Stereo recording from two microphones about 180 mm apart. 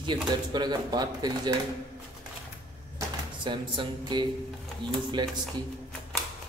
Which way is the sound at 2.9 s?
25° right (ahead or behind).